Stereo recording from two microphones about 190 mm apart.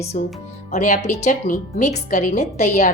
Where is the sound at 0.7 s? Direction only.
40° left (ahead or behind).